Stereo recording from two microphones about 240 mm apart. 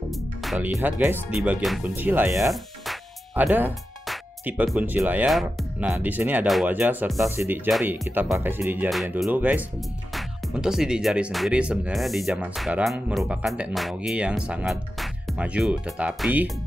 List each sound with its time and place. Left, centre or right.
0.1 s speech: centre